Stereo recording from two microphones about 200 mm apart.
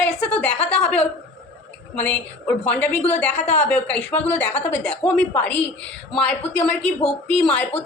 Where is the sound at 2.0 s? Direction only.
10° left (ahead or behind).